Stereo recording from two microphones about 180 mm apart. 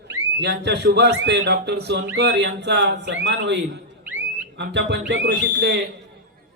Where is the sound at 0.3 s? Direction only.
70° right (ahead or behind).